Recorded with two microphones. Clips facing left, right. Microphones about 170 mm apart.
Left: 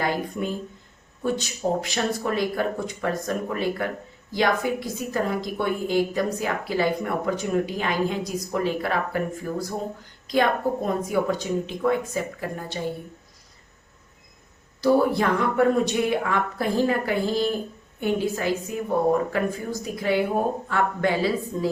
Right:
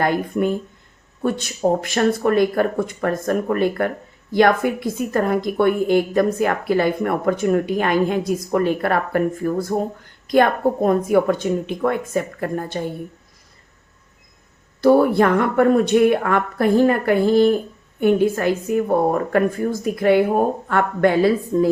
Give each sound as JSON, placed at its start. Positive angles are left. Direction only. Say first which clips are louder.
{"t": 0.0, "sound": "speech", "louder": "right 7 dB", "side_deg": -55}
{"t": 14.8, "sound": "speech", "louder": "right 6 dB", "side_deg": -60}